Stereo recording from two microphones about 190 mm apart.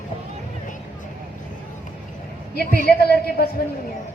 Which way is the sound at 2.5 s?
55° left (ahead or behind).